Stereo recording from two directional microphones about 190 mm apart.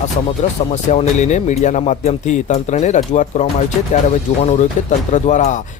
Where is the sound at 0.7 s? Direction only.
35° left (ahead or behind).